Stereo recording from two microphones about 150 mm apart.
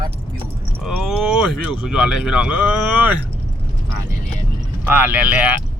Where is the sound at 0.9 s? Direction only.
Centre (ahead or behind).